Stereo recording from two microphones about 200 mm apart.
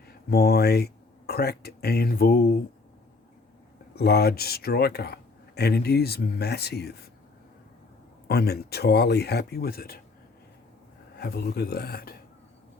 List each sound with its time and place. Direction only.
0.3 s speech: 50° left (ahead or behind)
3.9 s speech: 55° left (ahead or behind)
8.3 s speech: 55° left (ahead or behind)
11.2 s speech: 50° left (ahead or behind)